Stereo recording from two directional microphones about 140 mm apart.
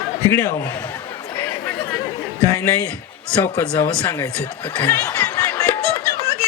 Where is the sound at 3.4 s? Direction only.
15° left (ahead or behind).